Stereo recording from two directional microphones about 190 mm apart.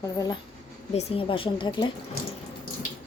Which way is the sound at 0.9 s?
35° left (ahead or behind).